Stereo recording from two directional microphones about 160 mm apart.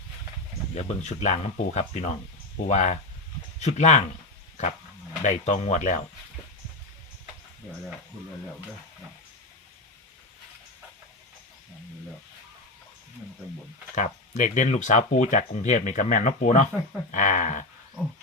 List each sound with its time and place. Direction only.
0.8 s speech: 45° left (ahead or behind)
5.2 s speech: 50° left (ahead or behind)
13.9 s speech: 50° left (ahead or behind)